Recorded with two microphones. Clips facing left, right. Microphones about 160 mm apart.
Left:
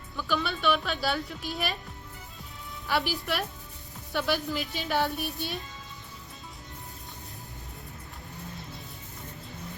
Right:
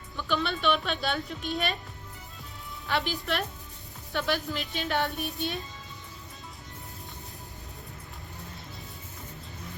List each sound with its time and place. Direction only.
0.3 s a woman's voice: 5° left (ahead or behind)
3.1 s a woman's voice: 5° left (ahead or behind)